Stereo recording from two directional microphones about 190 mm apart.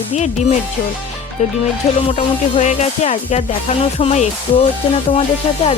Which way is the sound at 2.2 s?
35° left (ahead or behind).